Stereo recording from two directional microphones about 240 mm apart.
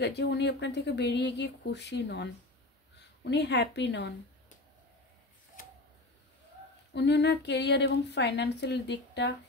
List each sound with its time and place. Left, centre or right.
0.0 s speech: left
3.3 s speech: left
6.9 s speech: left